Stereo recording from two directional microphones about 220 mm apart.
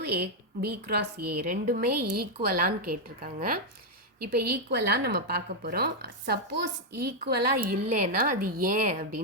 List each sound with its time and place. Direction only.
0.0 s a woman's voice: 45° right (ahead or behind)
8.4 s speech: 90° right
8.7 s a woman's voice: 35° right (ahead or behind)